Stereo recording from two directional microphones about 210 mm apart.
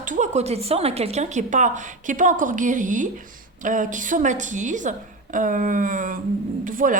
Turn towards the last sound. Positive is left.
turn(degrees=-40)  # may be behind; listen again after turning